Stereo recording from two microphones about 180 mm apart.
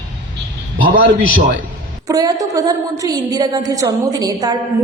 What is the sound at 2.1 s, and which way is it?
A man's voice, 20° right (ahead or behind).